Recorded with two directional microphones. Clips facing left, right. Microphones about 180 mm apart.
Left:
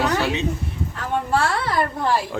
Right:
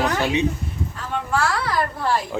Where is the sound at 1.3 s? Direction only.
25° left (ahead or behind).